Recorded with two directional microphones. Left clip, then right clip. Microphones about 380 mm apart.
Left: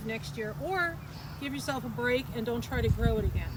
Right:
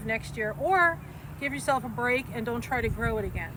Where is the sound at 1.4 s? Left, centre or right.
Centre.